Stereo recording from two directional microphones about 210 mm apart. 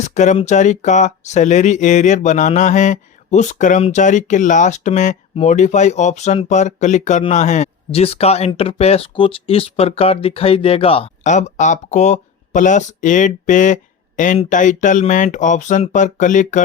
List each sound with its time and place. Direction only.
0.0 s speech: 35° left (ahead or behind)